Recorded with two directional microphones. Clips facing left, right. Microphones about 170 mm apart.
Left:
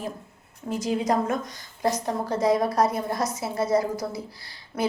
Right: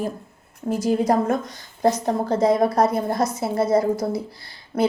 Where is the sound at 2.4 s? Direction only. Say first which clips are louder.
Right 3 dB; 55° right (ahead or behind).